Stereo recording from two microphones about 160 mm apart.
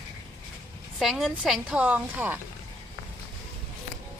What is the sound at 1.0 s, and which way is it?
A woman's voice, centre (ahead or behind).